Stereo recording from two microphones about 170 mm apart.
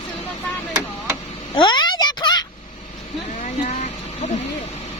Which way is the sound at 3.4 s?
40° left (ahead or behind).